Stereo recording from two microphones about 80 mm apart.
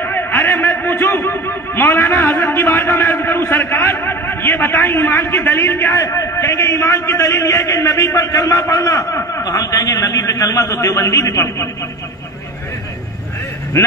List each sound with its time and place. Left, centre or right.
0.0 s a man's voice: left